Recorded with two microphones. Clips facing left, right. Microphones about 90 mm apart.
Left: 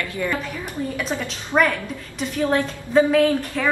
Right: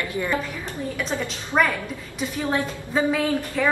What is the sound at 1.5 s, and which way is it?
Speech, 10° left (ahead or behind).